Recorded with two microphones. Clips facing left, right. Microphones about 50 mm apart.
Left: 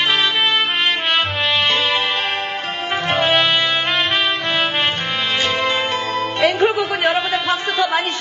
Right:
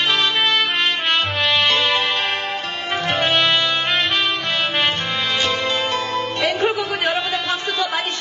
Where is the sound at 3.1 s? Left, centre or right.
Centre.